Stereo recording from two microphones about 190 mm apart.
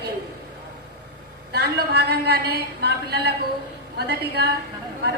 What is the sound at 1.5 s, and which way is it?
A woman's voice, 60° right (ahead or behind).